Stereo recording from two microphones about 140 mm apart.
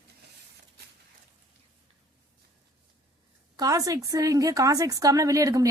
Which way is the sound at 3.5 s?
25° right (ahead or behind).